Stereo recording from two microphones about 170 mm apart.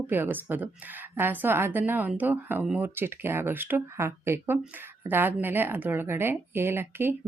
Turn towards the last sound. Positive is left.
turn(degrees=-15)  # may be behind; listen again after turning